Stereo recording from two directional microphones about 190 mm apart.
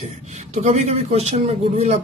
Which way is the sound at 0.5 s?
35° right (ahead or behind).